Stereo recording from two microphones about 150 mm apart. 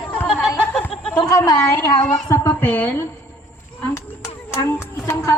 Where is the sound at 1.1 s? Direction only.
25° left (ahead or behind).